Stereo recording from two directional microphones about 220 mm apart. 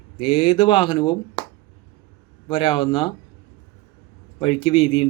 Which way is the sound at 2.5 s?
25° left (ahead or behind).